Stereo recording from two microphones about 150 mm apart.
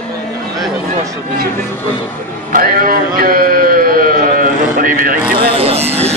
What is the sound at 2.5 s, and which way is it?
Speech, 70° right (ahead or behind).